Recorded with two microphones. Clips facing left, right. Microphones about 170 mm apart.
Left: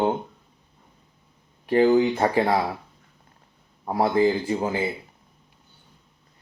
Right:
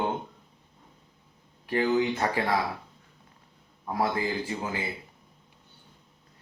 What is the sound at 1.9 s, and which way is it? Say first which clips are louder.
Speech: left 6 dB; 30° left (ahead or behind).